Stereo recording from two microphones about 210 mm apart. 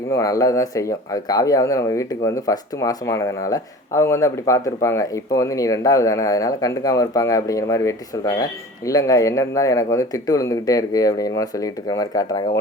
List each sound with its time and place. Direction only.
0.1 s speech: 15° left (ahead or behind)